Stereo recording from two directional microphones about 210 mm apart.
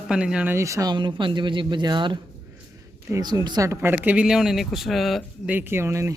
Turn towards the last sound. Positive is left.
turn(degrees=-15)  # may be behind; listen again after turning